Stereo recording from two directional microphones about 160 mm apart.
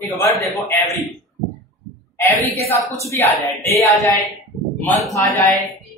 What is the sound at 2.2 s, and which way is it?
Speech, 15° left (ahead or behind).